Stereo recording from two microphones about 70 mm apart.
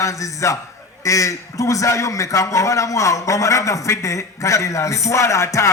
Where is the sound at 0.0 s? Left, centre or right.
Left.